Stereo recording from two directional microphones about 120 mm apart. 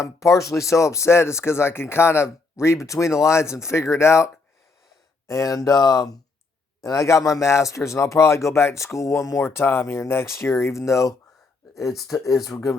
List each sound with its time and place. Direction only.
0.0 s speech: 25° left (ahead or behind)
5.3 s speech: 30° left (ahead or behind)